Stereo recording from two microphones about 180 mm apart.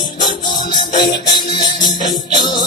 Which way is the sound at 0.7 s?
25° left (ahead or behind).